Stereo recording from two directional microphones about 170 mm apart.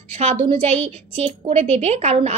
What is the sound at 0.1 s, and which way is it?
A woman's voice, 35° right (ahead or behind).